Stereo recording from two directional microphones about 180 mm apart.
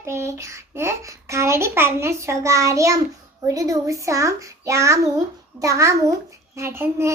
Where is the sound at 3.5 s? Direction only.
20° right (ahead or behind).